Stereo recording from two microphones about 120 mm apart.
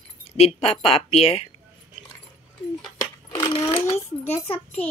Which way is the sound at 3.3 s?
45° left (ahead or behind).